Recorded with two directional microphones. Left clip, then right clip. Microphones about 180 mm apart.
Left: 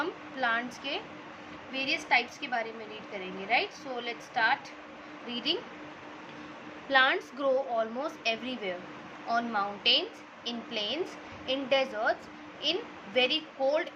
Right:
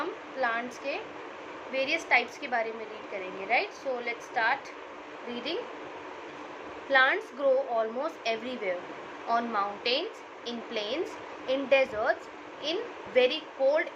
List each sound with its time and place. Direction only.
0.0 s a sound: 30° left (ahead or behind)
1.7 s a woman's voice: 15° left (ahead or behind)
6.9 s a woman's voice: 25° left (ahead or behind)